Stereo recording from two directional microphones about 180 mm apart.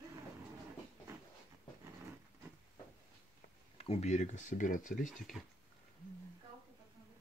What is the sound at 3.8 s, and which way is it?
Speech, 35° left (ahead or behind).